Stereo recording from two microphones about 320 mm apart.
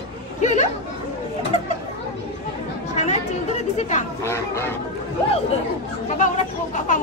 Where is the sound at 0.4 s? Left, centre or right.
Left.